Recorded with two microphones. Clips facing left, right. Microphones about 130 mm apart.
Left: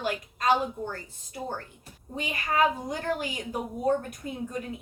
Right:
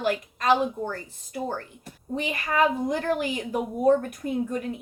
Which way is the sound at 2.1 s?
50° right (ahead or behind).